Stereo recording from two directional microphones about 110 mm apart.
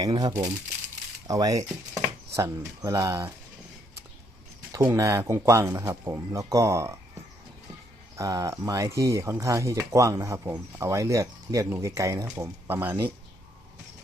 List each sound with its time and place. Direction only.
0.0 s speech: 40° right (ahead or behind)
4.7 s speech: 25° right (ahead or behind)
8.1 s speech: 30° right (ahead or behind)